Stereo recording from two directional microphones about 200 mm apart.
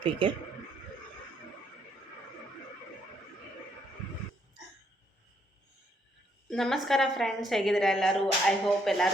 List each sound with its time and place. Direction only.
0.0 s a man's voice: 25° right (ahead or behind)
6.5 s a woman's voice: centre (ahead or behind)